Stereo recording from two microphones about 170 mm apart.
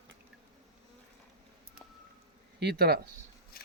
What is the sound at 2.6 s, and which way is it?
Speech, 70° right (ahead or behind).